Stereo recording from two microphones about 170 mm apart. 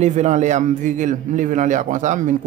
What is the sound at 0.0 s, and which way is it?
A man's voice, 45° right (ahead or behind).